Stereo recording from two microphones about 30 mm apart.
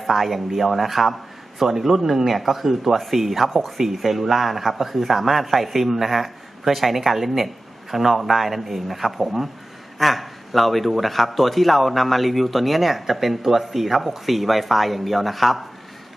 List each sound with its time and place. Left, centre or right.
0.0 s a man's voice: centre